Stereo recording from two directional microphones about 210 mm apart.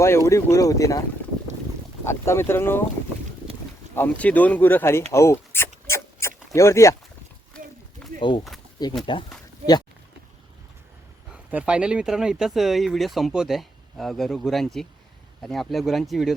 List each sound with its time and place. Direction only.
0.0 s speech: 15° left (ahead or behind)
2.0 s speech: 10° left (ahead or behind)
3.9 s speech: 10° left (ahead or behind)
5.9 s a sound: 15° left (ahead or behind)
8.8 s speech: 20° left (ahead or behind)
11.3 s speech: 5° right (ahead or behind)